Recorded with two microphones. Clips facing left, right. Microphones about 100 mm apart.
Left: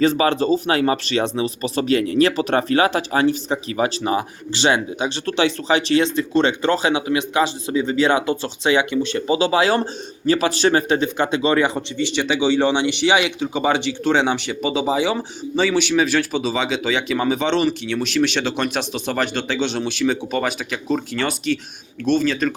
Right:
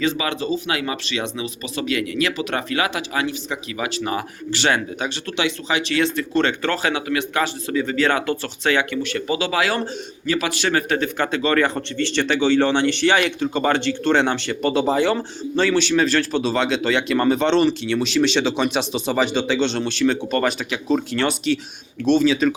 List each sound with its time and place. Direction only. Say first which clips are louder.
0.0 s speech: left 6 dB; 40° left (ahead or behind); by 5.1 s 20° left (ahead or behind)
5.2 s speech: left 6 dB; 35° left (ahead or behind); by 22.5 s centre (ahead or behind)